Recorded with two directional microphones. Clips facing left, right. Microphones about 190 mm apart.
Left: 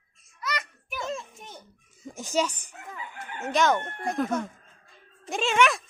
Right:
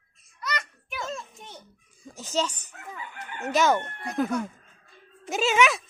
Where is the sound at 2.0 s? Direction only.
20° left (ahead or behind).